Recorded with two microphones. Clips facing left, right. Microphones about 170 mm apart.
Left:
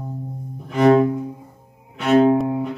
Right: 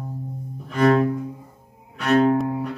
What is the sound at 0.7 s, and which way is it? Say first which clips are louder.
Music: left 4 dB; 20° left (ahead or behind).